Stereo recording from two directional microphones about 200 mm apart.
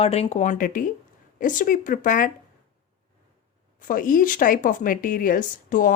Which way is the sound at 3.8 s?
45° left (ahead or behind).